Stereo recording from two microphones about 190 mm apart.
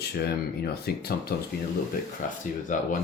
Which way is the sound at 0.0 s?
60° left (ahead or behind).